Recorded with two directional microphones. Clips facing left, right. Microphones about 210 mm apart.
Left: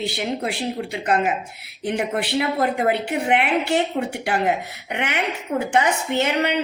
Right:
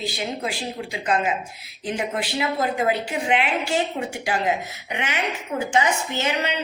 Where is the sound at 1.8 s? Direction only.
65° left (ahead or behind).